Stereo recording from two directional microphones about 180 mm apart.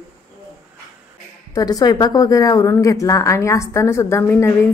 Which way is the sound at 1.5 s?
20° left (ahead or behind).